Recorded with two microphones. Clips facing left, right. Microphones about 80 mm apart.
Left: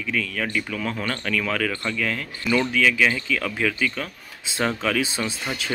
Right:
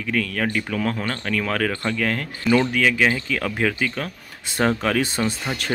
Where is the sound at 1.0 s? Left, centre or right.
Right.